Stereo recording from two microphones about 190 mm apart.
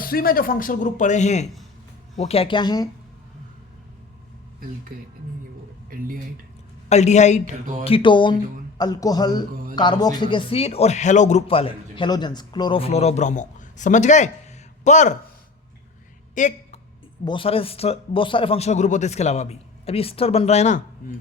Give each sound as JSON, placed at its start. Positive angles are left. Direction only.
{"t": 0.0, "sound": "a man's voice", "side_deg": 50}
{"t": 5.9, "sound": "speech", "side_deg": -50}
{"t": 6.8, "sound": "speech", "side_deg": 35}
{"t": 7.9, "sound": "speech", "side_deg": 25}
{"t": 16.3, "sound": "a sound", "side_deg": 40}
{"t": 17.2, "sound": "speech", "side_deg": 30}